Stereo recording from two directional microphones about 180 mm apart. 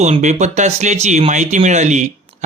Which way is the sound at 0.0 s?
40° right (ahead or behind).